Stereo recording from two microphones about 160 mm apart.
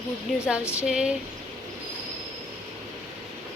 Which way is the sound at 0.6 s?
15° left (ahead or behind).